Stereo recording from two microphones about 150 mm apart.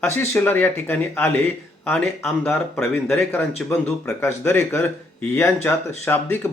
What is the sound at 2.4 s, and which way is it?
Speech, 10° left (ahead or behind).